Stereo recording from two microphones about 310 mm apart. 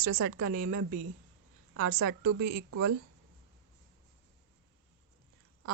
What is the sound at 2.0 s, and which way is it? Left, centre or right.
Speech, right.